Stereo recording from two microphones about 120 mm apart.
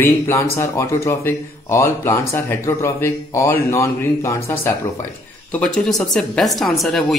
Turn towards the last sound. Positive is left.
turn(degrees=0)  # may be behind; listen again after turning